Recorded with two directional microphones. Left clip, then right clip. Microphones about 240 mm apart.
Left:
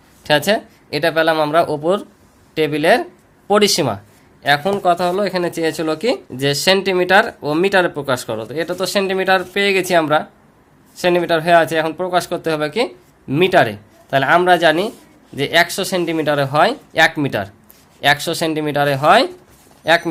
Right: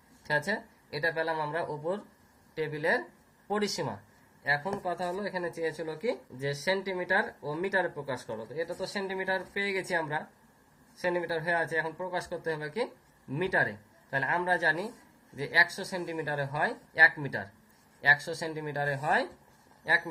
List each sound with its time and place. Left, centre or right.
0.3 s speech: left